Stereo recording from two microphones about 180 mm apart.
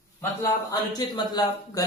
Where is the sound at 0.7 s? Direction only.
20° left (ahead or behind).